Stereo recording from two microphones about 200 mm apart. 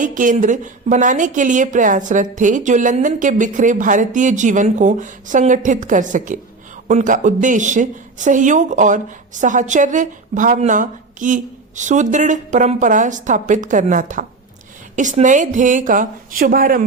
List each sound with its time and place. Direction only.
0.0 s a woman's voice: 40° right (ahead or behind)